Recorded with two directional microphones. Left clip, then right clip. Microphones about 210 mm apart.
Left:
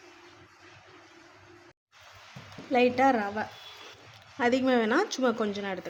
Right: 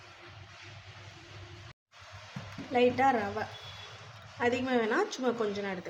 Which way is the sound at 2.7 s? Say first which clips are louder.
Left 3 dB; 45° left (ahead or behind).